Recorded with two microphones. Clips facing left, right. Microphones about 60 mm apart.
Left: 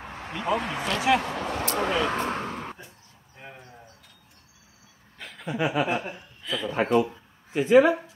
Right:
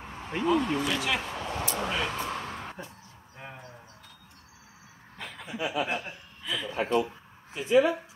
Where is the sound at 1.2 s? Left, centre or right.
Left.